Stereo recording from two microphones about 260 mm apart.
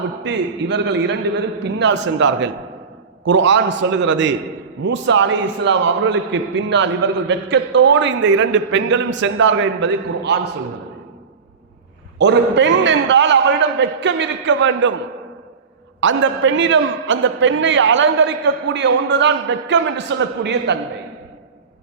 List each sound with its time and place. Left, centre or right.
0.2 s a man's voice: right
12.2 s a man's voice: right
16.0 s a man's voice: right